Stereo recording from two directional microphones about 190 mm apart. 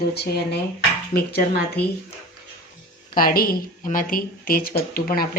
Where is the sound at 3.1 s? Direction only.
50° left (ahead or behind).